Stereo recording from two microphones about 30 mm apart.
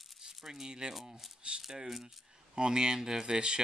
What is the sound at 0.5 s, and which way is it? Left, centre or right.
Speech, right.